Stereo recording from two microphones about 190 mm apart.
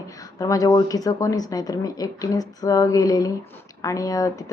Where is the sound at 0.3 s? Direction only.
20° left (ahead or behind).